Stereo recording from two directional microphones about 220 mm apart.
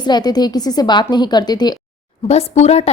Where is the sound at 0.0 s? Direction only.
20° left (ahead or behind).